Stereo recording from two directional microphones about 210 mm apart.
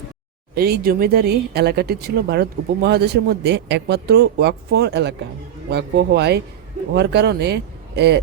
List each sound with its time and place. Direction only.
0.5 s speech: 50° right (ahead or behind)